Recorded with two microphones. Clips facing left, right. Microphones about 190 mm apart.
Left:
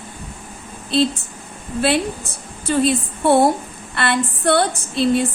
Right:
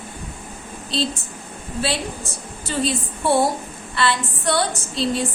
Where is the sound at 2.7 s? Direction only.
55° left (ahead or behind).